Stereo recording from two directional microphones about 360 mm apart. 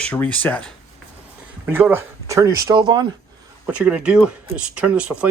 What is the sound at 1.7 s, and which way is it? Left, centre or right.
Speech, centre.